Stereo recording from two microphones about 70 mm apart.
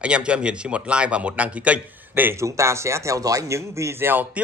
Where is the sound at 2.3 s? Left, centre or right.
Right.